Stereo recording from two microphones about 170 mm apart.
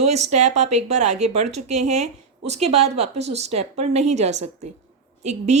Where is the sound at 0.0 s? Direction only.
40° right (ahead or behind).